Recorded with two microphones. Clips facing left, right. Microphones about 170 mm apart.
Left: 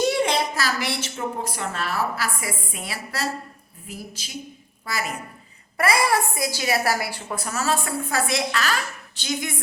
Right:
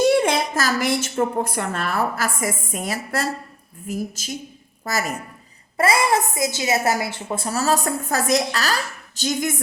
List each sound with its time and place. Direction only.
0.2 s a sound: 50° right (ahead or behind)
1.1 s a woman's voice: 55° right (ahead or behind)
5.7 s a woman's voice: 25° right (ahead or behind); by 9.6 s 45° right (ahead or behind)